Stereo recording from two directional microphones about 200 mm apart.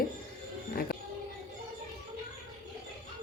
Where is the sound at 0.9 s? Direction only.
45° left (ahead or behind).